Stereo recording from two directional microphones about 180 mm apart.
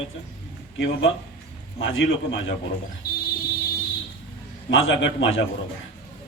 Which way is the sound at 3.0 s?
55° left (ahead or behind).